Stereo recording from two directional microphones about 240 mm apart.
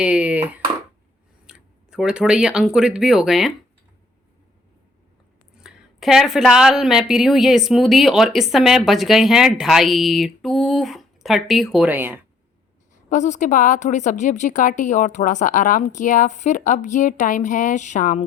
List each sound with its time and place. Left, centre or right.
0.0 s speech: centre
1.5 s speech: centre
5.6 s a woman's voice: centre
13.1 s a woman's voice: left